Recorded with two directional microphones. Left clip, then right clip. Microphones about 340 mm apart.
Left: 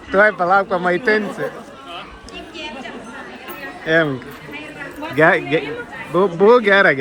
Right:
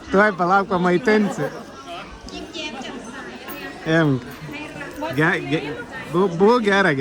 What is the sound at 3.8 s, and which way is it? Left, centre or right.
Speech, centre.